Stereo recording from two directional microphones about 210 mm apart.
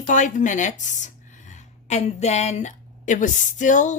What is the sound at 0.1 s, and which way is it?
Speech, 35° left (ahead or behind).